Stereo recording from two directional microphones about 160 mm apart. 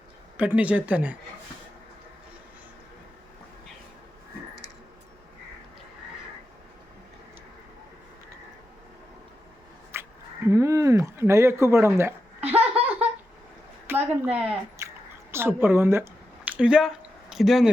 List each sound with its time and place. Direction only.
0.3 s speech: 10° right (ahead or behind)
9.9 s speech: 15° right (ahead or behind)
12.5 s a sound: 40° right (ahead or behind)
13.8 s a woman's voice: 15° right (ahead or behind)